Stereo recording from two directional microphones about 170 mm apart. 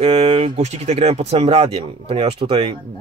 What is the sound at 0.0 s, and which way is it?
Speech, 35° right (ahead or behind).